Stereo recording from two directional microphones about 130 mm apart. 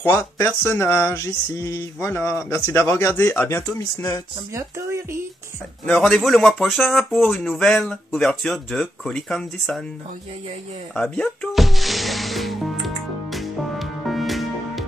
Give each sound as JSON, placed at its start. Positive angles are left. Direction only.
{"t": 0.0, "sound": "speech", "side_deg": 20}
{"t": 4.6, "sound": "speech", "side_deg": -20}
{"t": 5.9, "sound": "speech", "side_deg": 5}
{"t": 11.0, "sound": "music", "side_deg": 5}